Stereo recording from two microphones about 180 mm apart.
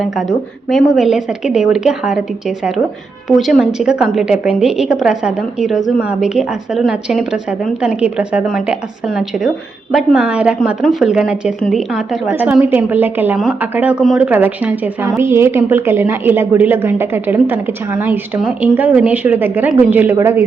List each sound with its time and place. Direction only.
0.0 s a woman's voice: centre (ahead or behind)
3.2 s a woman's voice: centre (ahead or behind)